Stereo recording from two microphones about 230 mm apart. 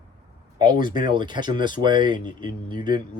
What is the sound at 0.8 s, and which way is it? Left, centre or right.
Speech, centre.